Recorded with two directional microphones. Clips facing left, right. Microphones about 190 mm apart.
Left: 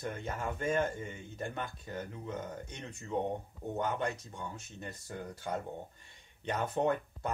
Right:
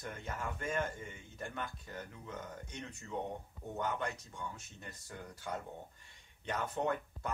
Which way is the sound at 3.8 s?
25° left (ahead or behind).